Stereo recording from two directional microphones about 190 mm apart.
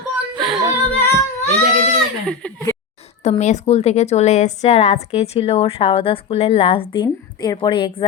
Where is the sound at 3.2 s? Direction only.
35° left (ahead or behind).